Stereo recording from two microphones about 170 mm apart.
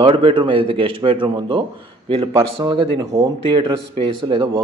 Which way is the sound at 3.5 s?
30° right (ahead or behind).